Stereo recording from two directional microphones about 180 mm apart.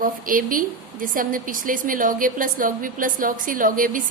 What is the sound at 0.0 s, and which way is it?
A woman's voice, 50° right (ahead or behind).